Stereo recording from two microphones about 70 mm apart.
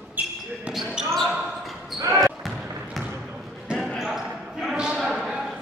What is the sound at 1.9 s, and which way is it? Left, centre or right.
Basketball bounce, right.